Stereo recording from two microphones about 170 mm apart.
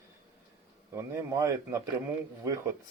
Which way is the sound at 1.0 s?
15° right (ahead or behind).